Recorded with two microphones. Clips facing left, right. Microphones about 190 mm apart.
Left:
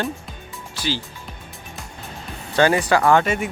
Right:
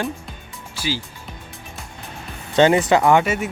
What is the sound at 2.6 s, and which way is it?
Speech, 20° right (ahead or behind).